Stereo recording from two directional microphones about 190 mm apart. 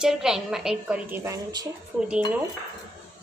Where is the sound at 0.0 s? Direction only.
5° right (ahead or behind).